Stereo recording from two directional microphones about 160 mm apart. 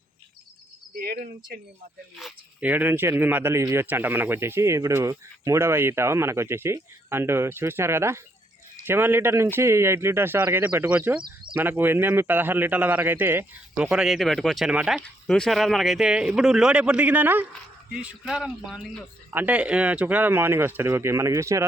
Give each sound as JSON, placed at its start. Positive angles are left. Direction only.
{"t": 0.9, "sound": "speech", "side_deg": -65}
{"t": 2.1, "sound": "speech", "side_deg": -5}
{"t": 19.3, "sound": "speech", "side_deg": -10}